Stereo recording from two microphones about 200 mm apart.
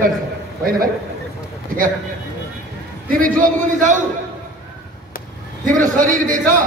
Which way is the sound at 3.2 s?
40° right (ahead or behind).